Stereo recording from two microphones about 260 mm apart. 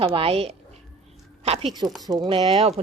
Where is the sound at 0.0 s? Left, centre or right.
Right.